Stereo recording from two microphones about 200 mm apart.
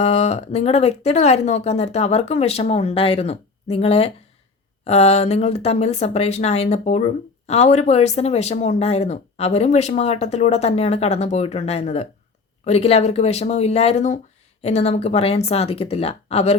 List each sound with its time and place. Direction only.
0.0 s speech: 30° left (ahead or behind)